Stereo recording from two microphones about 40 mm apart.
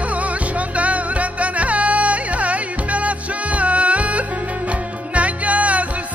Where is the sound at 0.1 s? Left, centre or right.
Right.